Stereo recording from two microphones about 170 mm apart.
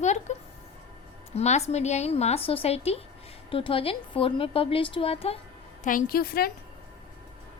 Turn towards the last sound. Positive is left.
turn(degrees=60)  # may be behind; listen again after turning